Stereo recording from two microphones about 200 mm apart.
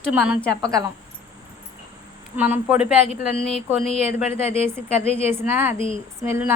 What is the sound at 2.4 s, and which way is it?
Speech, 10° right (ahead or behind).